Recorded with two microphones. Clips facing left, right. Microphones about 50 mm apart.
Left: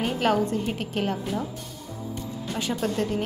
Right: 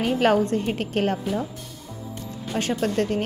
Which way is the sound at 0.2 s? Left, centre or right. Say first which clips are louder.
Right 3 dB; right.